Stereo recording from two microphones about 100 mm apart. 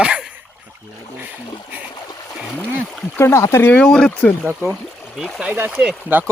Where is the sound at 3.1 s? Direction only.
25° left (ahead or behind).